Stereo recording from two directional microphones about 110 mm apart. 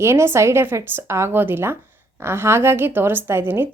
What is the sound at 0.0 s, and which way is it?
A woman's voice, 25° right (ahead or behind).